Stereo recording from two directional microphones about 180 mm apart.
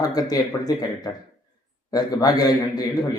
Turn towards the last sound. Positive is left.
turn(degrees=20)  # may be behind; listen again after turning